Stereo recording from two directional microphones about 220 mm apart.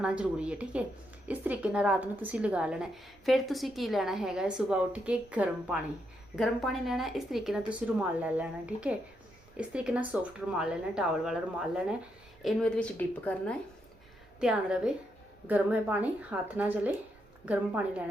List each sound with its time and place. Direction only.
0.0 s a woman's voice: 5° right (ahead or behind)